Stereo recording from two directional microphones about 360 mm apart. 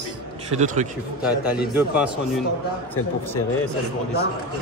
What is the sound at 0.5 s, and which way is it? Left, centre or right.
Speech, centre.